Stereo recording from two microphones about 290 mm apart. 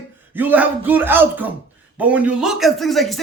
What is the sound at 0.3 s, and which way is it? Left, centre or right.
A man's voice, centre.